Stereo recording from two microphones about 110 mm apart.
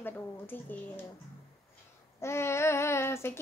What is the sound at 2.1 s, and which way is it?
Child singing, 25° left (ahead or behind).